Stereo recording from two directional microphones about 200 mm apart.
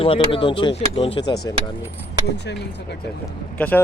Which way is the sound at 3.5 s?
10° left (ahead or behind).